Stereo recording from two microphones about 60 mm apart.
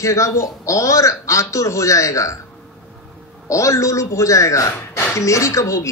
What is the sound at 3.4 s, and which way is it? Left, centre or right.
Speech, left.